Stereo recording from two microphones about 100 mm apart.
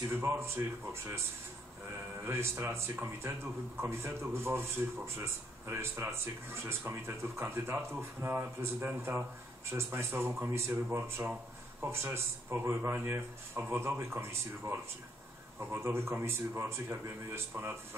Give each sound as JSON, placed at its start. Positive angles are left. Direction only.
{"t": 0.1, "sound": "speech", "side_deg": -25}
{"t": 2.2, "sound": "speech", "side_deg": -25}